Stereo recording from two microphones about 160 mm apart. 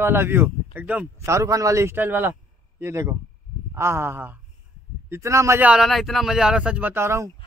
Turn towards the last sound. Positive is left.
turn(degrees=-15)  # may be behind; listen again after turning